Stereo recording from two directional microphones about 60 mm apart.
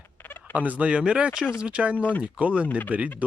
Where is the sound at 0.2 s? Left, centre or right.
Left.